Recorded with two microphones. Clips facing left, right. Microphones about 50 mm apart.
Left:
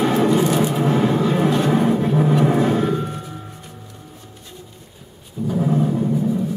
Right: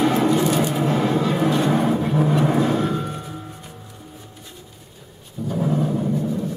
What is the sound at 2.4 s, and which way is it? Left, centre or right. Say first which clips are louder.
Vehicle: left 2 dB; left.